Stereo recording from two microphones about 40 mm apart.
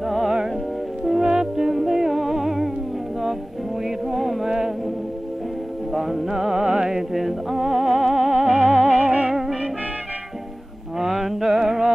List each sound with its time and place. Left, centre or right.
0.0 s music: centre
1.2 s music: centre
4.1 s a sound: centre
4.5 s music: centre
5.9 s music: centre
8.9 s music: right
9.3 s music: centre
11.0 s music: centre